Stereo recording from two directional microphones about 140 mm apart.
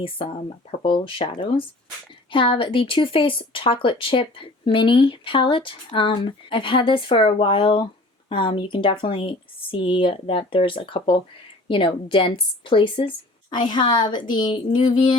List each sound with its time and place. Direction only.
0.0 s speech: 40° left (ahead or behind)